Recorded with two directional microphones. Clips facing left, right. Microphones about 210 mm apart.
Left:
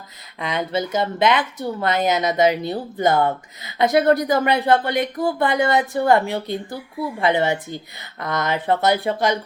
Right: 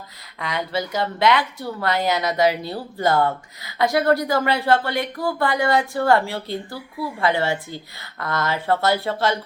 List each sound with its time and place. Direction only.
0.3 s speech: 20° left (ahead or behind)